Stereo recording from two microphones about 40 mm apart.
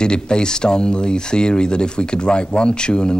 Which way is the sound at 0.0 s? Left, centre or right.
Left.